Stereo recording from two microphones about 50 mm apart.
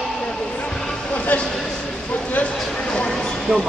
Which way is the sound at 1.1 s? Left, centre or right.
Left.